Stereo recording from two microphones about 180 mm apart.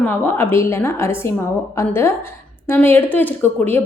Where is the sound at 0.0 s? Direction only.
10° left (ahead or behind).